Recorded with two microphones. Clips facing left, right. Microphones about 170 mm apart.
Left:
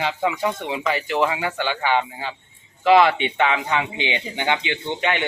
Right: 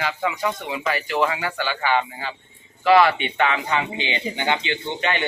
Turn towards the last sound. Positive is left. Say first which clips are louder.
# left 1 dB
turn(degrees=15)  # may be behind; listen again after turning